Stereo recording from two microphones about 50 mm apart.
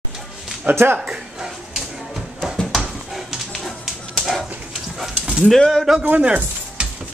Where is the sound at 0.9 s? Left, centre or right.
Centre.